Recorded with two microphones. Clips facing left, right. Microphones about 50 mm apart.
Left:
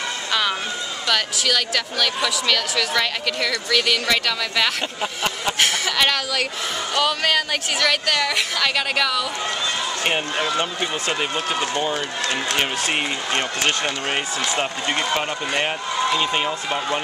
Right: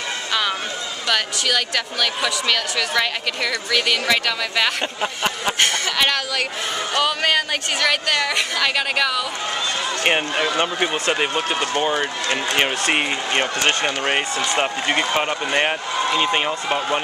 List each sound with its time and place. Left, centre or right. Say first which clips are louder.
0.3 s a sound: even; centre
1.0 s a woman's voice: even; centre
10.0 s speech: right 3 dB; right